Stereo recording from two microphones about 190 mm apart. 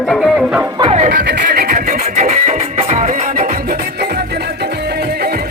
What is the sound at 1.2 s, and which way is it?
Music, 55° right (ahead or behind).